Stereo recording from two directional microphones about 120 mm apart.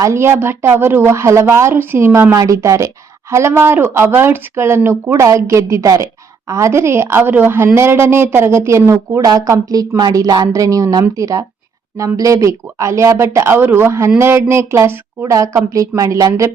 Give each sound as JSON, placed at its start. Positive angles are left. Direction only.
{"t": 0.0, "sound": "a woman's voice", "side_deg": -20}
{"t": 2.3, "sound": "a woman's voice", "side_deg": -30}